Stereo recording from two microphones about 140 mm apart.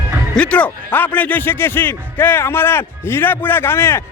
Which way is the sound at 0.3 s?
10° left (ahead or behind).